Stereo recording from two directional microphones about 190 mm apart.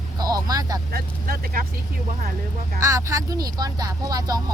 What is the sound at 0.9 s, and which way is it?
Speech, 50° right (ahead or behind).